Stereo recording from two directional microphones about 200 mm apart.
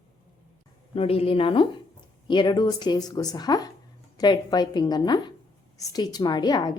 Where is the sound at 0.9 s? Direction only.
30° left (ahead or behind).